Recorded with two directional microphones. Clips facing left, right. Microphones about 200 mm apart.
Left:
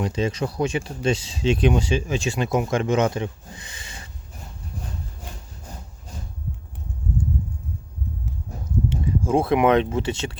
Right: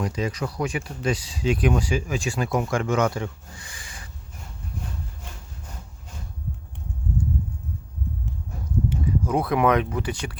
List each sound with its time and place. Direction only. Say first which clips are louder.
0.0 s speech: left 3 dB; 25° left (ahead or behind)
8.9 s speech: left 3 dB; 25° left (ahead or behind)